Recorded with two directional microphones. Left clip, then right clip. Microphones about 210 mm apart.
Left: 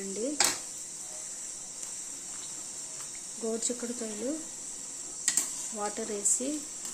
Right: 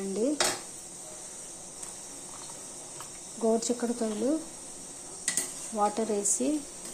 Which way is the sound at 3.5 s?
Centre (ahead or behind).